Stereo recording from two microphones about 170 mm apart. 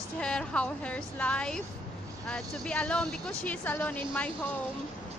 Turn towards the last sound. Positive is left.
turn(degrees=10)  # may be behind; listen again after turning